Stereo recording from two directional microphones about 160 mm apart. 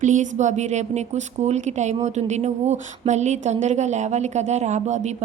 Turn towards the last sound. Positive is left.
turn(degrees=-45)  # may be behind; listen again after turning